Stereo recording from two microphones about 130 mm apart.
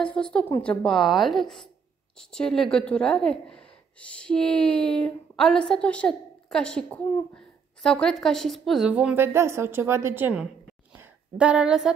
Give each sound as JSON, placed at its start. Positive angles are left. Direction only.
{"t": 0.0, "sound": "a woman's voice", "side_deg": 5}
{"t": 8.9, "sound": "a woman's voice", "side_deg": -15}
{"t": 11.0, "sound": "a sound", "side_deg": -10}